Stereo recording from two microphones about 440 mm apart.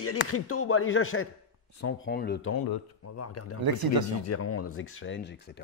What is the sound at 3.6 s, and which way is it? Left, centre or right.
Speech, right.